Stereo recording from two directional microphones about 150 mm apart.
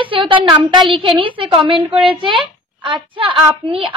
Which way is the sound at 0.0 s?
35° right (ahead or behind).